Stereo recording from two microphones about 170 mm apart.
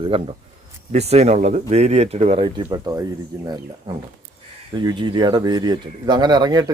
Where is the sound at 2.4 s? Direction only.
25° right (ahead or behind).